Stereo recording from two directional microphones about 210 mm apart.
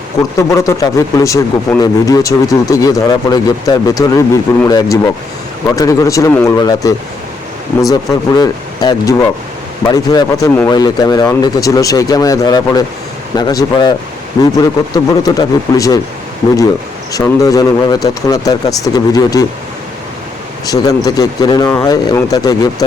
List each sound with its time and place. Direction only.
0.3 s a man's voice: 15° left (ahead or behind)
14.9 s a man's voice: 15° left (ahead or behind)
17.1 s a man's voice: 15° left (ahead or behind)
20.7 s a man's voice: 15° left (ahead or behind)